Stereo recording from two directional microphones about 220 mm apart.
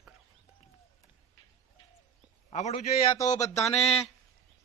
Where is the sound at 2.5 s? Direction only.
30° left (ahead or behind).